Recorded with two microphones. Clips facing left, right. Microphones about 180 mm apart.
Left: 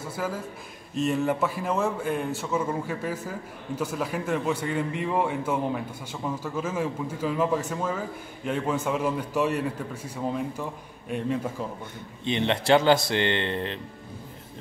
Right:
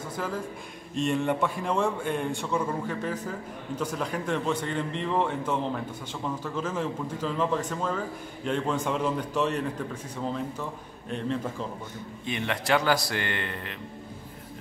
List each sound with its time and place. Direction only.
0.1 s a man's voice: 5° left (ahead or behind)
12.3 s speech: 25° left (ahead or behind)